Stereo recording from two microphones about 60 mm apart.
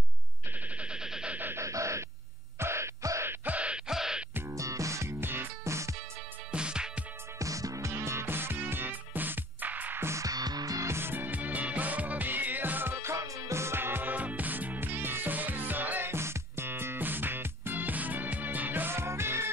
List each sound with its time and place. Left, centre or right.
0.7 s a sound: centre
1.5 s a sound: right
2.6 s music: right
3.4 s music: right
4.5 s music: right
5.2 s music: right
5.6 s music: right
6.5 s music: centre
7.3 s music: right
10.2 s music: right
10.9 s music: right
13.1 s music: right
16.1 s music: right